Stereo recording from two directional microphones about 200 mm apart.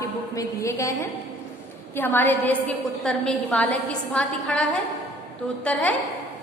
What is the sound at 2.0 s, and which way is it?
A woman's voice, 10° left (ahead or behind).